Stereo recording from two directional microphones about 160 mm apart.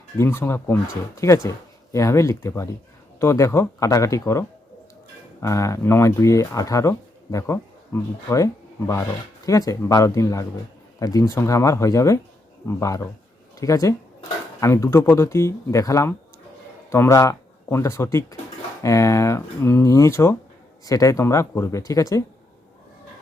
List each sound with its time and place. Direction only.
0.2 s speech: 15° left (ahead or behind)
9.5 s speech: 20° left (ahead or behind)